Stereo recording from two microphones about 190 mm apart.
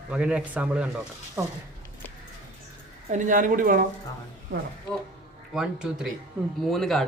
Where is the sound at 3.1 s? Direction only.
40° right (ahead or behind).